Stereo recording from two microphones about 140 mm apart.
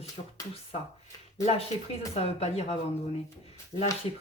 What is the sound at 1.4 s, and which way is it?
Speech, 50° left (ahead or behind).